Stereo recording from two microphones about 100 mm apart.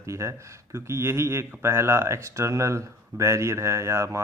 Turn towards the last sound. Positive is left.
turn(degrees=-30)  # may be behind; listen again after turning